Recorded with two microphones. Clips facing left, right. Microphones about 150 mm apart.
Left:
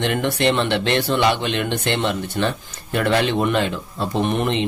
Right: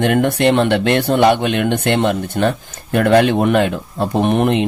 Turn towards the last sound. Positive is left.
turn(degrees=-55)  # may be behind; listen again after turning